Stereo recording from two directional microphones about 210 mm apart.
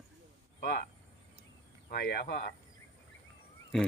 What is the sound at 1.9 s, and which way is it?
Cricket, 50° left (ahead or behind).